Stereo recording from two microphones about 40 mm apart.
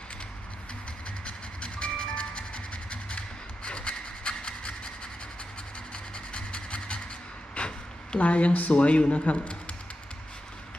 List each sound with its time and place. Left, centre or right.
1.2 s music: left
5.9 s rub: left
7.6 s a sound: left
8.2 s speech: left